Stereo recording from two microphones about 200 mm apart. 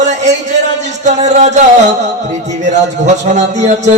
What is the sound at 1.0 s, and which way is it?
Music, 35° right (ahead or behind).